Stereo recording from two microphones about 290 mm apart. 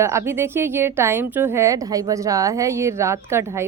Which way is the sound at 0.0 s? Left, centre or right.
Centre.